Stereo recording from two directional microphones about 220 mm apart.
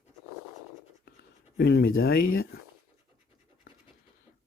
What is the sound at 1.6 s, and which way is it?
Speech, 50° left (ahead or behind).